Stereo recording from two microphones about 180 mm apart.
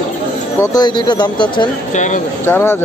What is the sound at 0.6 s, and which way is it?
Speech, 20° left (ahead or behind).